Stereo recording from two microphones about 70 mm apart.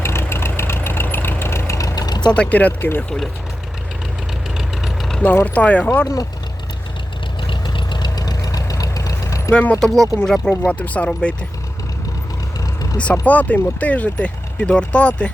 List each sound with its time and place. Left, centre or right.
0.0 s vehicle: left
2.0 s vehicle: left
2.3 s speech: centre
4.5 s vehicle: centre
5.2 s speech: left
7.7 s vehicle: left
9.5 s speech: centre
9.8 s speech: centre
10.7 s speech: centre
13.2 s speech: left